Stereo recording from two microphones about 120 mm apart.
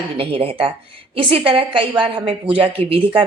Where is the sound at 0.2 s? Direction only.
50° right (ahead or behind).